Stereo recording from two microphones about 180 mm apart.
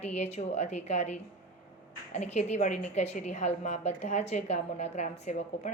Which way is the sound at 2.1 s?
40° left (ahead or behind).